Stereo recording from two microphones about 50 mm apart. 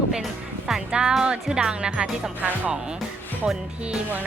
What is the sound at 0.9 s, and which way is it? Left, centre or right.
Speech, centre.